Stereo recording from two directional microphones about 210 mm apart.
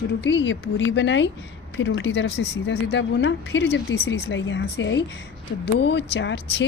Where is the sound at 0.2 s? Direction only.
60° left (ahead or behind).